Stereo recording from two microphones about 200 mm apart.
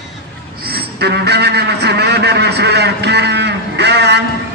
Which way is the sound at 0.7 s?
55° right (ahead or behind).